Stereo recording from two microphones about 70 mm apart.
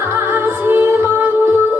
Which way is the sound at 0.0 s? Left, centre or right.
Right.